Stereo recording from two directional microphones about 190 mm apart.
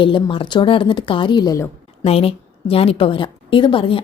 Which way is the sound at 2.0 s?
30° left (ahead or behind).